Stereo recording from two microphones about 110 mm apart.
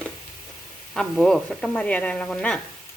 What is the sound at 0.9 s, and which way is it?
Speech, 5° left (ahead or behind).